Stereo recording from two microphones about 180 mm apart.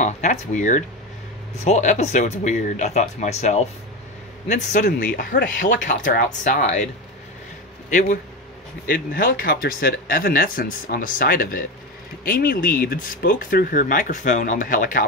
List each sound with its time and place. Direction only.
0.0 s speech: 45° left (ahead or behind)
7.9 s speech: 45° left (ahead or behind)
8.8 s speech: 55° left (ahead or behind)